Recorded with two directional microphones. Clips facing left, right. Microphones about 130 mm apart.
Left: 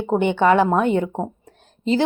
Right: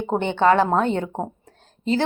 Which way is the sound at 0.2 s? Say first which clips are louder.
Left 1 dB; 15° left (ahead or behind).